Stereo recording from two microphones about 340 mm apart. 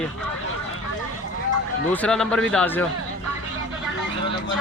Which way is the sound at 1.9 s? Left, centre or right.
Centre.